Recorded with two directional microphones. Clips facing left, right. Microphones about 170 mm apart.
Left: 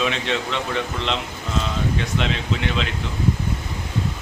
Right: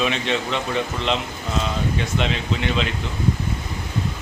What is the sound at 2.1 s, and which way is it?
Speech, centre (ahead or behind).